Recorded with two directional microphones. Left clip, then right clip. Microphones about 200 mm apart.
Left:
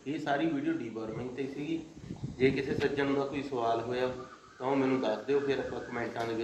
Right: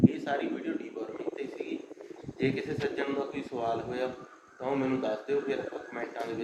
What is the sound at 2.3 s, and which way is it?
A man's voice, 15° right (ahead or behind).